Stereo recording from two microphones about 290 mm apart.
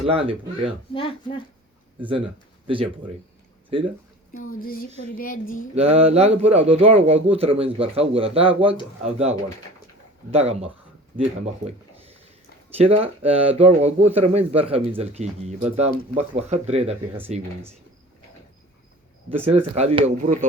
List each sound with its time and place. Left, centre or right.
0.0 s speech: centre
0.9 s speech: centre
2.6 s speech: centre
4.6 s speech: left
5.7 s speech: right
10.3 s speech: right
19.5 s speech: right